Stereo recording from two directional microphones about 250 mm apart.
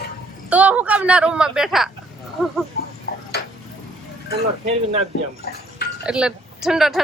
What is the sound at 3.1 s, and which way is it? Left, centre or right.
Tick-tock, left.